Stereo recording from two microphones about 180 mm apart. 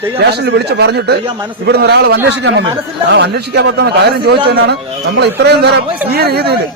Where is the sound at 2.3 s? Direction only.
85° right.